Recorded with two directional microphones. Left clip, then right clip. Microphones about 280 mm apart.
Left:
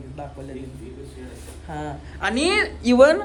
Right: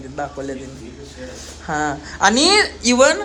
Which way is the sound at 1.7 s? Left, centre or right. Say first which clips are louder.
Right 11 dB; centre.